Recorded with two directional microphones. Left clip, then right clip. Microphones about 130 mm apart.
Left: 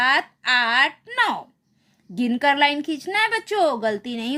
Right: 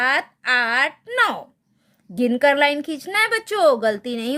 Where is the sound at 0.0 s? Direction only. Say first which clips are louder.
Left 1 dB; 25° right (ahead or behind).